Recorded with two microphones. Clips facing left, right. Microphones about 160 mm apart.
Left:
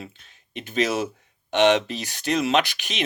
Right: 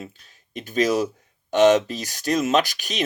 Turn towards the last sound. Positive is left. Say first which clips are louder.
# right 2 dB
turn(degrees=-45)  # may be behind; listen again after turning